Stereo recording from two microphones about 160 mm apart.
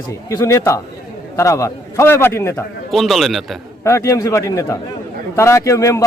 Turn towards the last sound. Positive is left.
turn(degrees=20)  # may be behind; listen again after turning